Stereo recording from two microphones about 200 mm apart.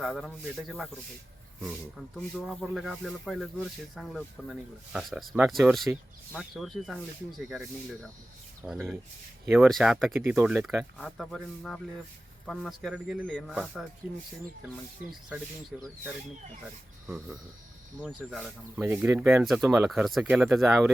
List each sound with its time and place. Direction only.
0.0 s speech: centre (ahead or behind)
10.2 s speech: 10° right (ahead or behind)
15.7 s speech: 5° right (ahead or behind)
18.0 s speech: centre (ahead or behind)
19.9 s speech: centre (ahead or behind)